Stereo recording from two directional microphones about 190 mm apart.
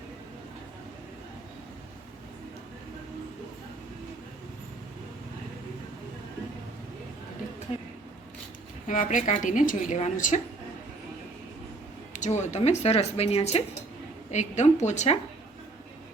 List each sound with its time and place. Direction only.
8.9 s a woman's voice: 40° left (ahead or behind)
12.1 s a woman's voice: 40° left (ahead or behind)